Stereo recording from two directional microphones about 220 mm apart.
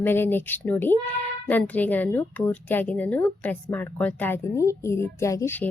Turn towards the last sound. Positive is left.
turn(degrees=10)  # may be behind; listen again after turning